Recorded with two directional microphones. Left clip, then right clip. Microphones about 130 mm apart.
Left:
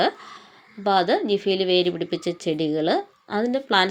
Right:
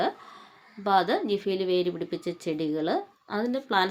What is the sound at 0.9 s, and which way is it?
A woman's voice, 15° left (ahead or behind).